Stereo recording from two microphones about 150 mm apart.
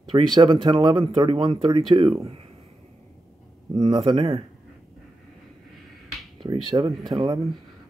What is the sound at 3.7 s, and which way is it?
Speech, 30° right (ahead or behind).